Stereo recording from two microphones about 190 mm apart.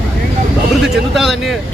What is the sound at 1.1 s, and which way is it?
Speech, centre (ahead or behind).